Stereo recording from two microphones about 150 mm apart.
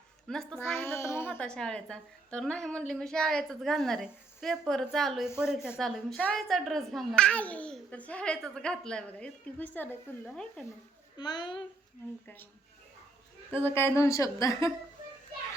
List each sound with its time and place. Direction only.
0.3 s a woman's voice: 5° left (ahead or behind)
0.8 s a woman's voice: 15° left (ahead or behind)
11.2 s a woman's voice: 30° left (ahead or behind)
13.7 s a woman's voice: 15° left (ahead or behind)